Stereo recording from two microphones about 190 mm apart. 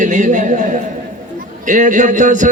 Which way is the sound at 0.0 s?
40° right (ahead or behind).